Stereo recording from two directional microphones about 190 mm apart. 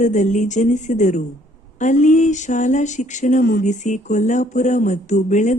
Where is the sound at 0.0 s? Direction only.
40° left (ahead or behind).